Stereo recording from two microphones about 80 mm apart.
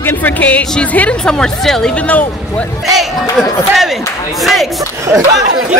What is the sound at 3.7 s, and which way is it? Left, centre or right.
Speech, centre.